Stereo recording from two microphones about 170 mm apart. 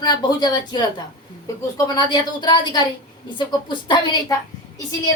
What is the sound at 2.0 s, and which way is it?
A woman's voice, 25° left (ahead or behind).